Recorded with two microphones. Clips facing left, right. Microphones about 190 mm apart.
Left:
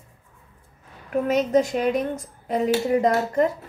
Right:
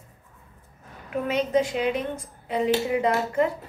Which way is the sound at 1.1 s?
45° left (ahead or behind).